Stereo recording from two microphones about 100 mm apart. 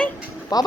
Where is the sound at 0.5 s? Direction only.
40° left (ahead or behind).